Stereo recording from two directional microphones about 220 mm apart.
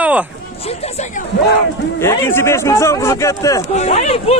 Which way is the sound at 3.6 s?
30° left (ahead or behind).